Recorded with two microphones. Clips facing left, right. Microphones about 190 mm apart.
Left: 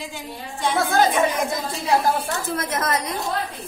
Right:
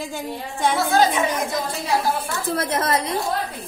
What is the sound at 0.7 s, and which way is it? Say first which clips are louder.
Speech: left 1 dB; 55° left (ahead or behind).